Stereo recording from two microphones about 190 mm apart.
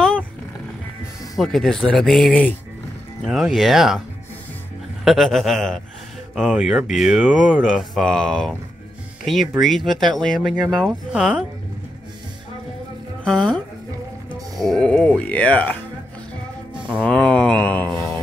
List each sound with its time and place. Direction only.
1.4 s speech: centre (ahead or behind)
5.0 s speech: centre (ahead or behind)
13.2 s speech: 5° left (ahead or behind)
14.7 s mantra: 5° left (ahead or behind)
17.0 s mantra: 5° left (ahead or behind)